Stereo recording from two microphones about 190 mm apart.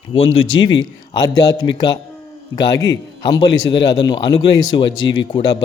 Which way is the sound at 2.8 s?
20° left (ahead or behind).